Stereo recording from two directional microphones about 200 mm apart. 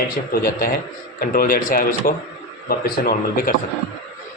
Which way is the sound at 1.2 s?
45° left (ahead or behind).